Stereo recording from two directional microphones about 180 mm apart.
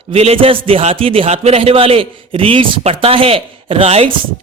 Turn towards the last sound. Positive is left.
turn(degrees=-30)  # may be behind; listen again after turning